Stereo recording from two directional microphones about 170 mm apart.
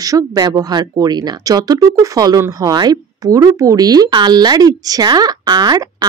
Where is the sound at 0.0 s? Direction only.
20° right (ahead or behind).